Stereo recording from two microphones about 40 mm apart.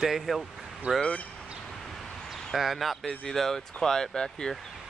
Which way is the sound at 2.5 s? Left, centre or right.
Centre.